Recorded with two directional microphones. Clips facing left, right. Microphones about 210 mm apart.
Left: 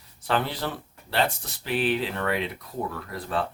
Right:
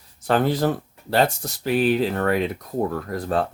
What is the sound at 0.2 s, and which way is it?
Speech, 45° right (ahead or behind).